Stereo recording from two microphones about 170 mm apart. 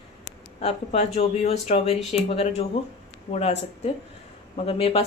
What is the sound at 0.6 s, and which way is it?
Speech, 35° left (ahead or behind).